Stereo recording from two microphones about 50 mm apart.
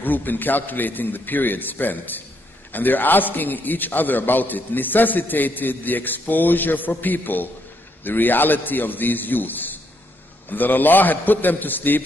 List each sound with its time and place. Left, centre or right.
0.0 s a man's voice: left